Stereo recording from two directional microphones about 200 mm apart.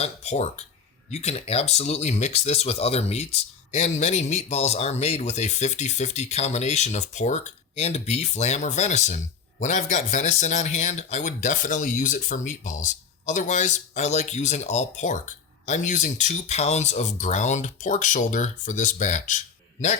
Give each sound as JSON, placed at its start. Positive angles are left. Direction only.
{"t": 0.0, "sound": "speech", "side_deg": 35}